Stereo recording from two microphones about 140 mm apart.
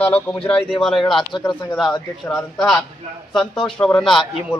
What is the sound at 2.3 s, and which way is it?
A man's voice, 5° left (ahead or behind).